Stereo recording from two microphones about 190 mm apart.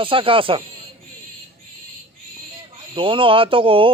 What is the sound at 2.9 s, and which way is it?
Speech, 25° right (ahead or behind).